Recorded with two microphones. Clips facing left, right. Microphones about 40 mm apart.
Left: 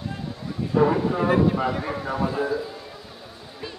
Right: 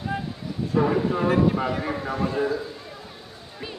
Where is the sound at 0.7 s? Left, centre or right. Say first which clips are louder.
Left 2 dB; centre.